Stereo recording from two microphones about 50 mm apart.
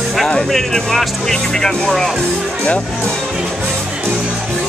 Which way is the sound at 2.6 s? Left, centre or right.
Centre.